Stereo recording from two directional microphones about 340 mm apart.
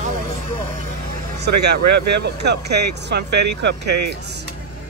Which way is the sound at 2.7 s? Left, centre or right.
Right.